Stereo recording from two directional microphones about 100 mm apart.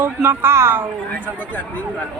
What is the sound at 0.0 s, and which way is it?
Speech, 20° right (ahead or behind).